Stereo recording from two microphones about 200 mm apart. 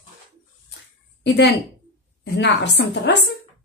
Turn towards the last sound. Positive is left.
turn(degrees=60)  # may be behind; listen again after turning